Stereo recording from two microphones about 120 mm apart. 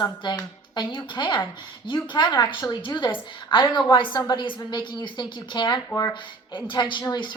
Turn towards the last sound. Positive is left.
turn(degrees=40)  # may be behind; listen again after turning